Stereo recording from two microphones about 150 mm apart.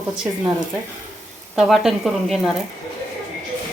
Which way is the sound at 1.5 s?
5° right (ahead or behind).